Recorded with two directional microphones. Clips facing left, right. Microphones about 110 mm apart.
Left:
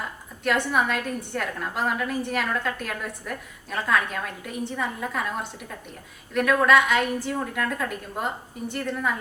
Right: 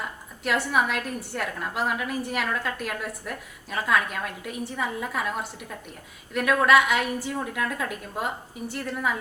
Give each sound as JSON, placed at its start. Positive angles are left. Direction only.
{"t": 0.4, "sound": "a woman's voice", "side_deg": -5}